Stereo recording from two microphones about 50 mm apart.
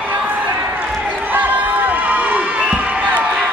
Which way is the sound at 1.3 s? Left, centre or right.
Right.